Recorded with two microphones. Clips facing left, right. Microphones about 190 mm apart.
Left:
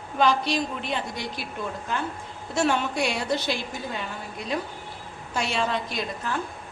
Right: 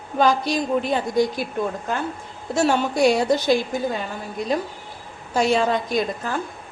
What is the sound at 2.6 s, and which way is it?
A woman's voice, 40° right (ahead or behind).